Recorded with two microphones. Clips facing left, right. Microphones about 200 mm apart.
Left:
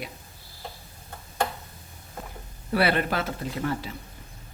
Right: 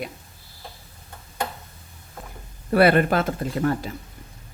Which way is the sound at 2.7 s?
50° right (ahead or behind).